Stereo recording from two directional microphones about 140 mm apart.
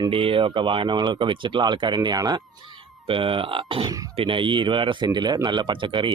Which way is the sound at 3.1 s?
40° right (ahead or behind).